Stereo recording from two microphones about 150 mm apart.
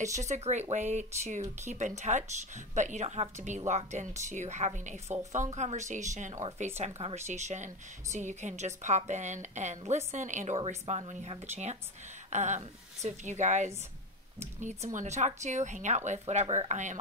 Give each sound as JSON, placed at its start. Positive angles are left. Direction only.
{"t": 0.2, "sound": "a woman's voice", "side_deg": -50}